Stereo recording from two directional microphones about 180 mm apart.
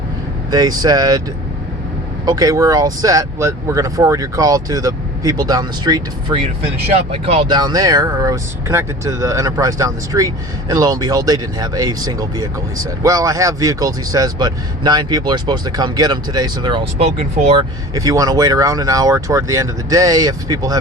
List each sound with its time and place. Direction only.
0.5 s speech: 20° right (ahead or behind)
2.2 s speech: 20° right (ahead or behind); by 17.6 s 40° right (ahead or behind)
17.6 s speech: 20° right (ahead or behind)